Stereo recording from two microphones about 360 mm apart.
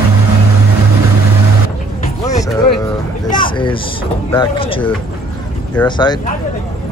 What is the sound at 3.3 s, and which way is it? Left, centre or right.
Speech, centre.